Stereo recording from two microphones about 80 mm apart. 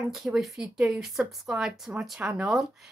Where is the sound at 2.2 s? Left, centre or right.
Centre.